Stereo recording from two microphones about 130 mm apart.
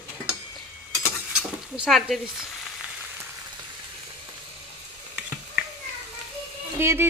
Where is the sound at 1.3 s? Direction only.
Centre (ahead or behind).